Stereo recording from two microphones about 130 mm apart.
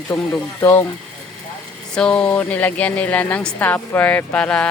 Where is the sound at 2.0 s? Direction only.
10° left (ahead or behind).